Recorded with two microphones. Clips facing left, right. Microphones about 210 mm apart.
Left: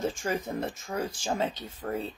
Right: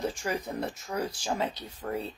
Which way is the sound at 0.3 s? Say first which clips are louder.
Left 1 dB; 20° left (ahead or behind).